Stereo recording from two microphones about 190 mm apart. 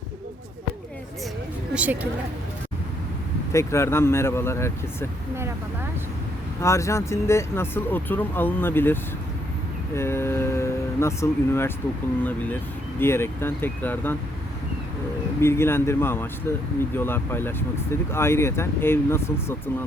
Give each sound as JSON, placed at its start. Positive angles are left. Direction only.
{"t": 1.7, "sound": "a woman's voice", "side_deg": -10}
{"t": 3.5, "sound": "speech", "side_deg": 15}
{"t": 6.6, "sound": "speech", "side_deg": 15}
{"t": 13.0, "sound": "speech", "side_deg": 15}
{"t": 15.4, "sound": "speech", "side_deg": 15}